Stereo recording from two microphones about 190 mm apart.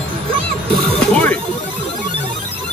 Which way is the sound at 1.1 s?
5° left (ahead or behind).